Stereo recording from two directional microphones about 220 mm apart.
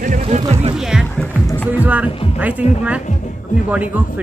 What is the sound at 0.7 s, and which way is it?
Speech, centre (ahead or behind).